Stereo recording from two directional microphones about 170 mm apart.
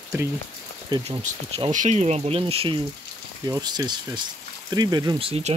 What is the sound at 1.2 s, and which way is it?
Speech, 40° right (ahead or behind).